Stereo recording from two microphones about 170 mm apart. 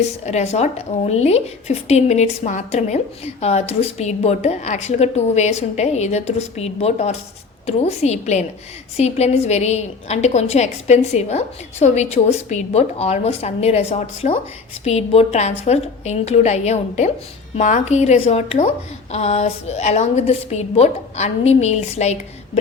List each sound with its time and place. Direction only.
0.3 s a woman's voice: 40° left (ahead or behind)